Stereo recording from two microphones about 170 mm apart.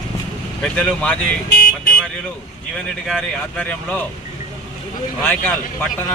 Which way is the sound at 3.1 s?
5° left (ahead or behind).